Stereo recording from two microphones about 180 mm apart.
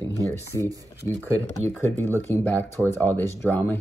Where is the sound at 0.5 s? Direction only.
20° left (ahead or behind).